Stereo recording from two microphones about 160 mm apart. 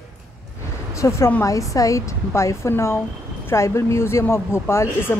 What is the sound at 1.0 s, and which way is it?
A woman's voice, 15° left (ahead or behind).